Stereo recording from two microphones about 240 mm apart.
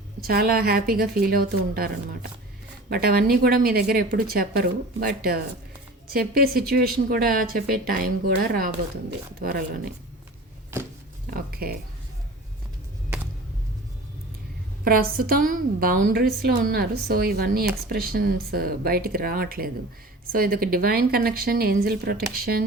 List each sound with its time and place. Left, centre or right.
0.2 s a woman's voice: right
2.9 s a woman's voice: right
11.3 s a woman's voice: right
14.8 s a woman's voice: right